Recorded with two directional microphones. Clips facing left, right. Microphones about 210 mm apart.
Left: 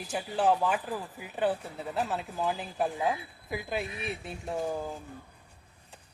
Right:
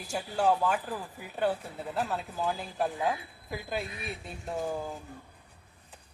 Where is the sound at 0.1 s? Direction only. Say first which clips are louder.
Even; 5° left (ahead or behind).